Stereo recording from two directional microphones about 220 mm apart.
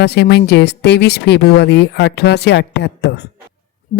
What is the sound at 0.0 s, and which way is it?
Speech, 50° left (ahead or behind).